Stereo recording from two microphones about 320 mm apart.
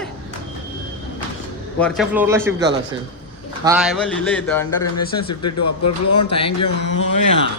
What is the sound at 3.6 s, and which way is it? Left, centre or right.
Speech, centre.